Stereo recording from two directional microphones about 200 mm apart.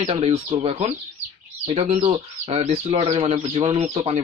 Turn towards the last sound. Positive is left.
turn(degrees=-30)  # may be behind; listen again after turning